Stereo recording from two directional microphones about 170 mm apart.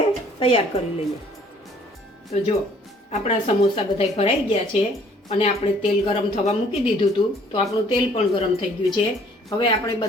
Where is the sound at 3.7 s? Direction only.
35° left (ahead or behind).